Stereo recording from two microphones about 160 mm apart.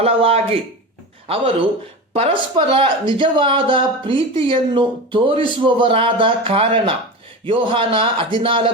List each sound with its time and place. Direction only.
0.0 s speech: 40° right (ahead or behind)